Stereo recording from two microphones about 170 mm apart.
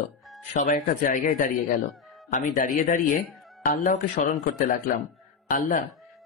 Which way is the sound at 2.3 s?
45° left (ahead or behind).